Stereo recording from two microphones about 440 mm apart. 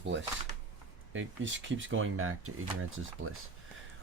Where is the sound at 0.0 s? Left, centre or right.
Right.